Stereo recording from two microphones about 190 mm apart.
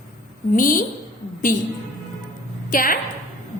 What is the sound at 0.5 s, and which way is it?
Speech, 45° left (ahead or behind).